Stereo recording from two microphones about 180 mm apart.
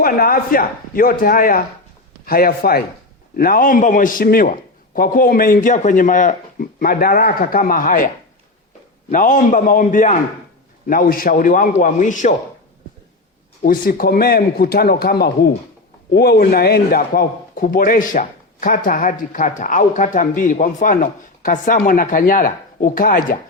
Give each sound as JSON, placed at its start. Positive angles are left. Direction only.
{"t": 0.0, "sound": "a man's voice", "side_deg": 55}
{"t": 13.6, "sound": "a man's voice", "side_deg": 50}